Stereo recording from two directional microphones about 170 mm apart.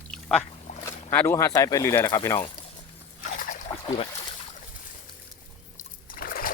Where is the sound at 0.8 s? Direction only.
10° left (ahead or behind).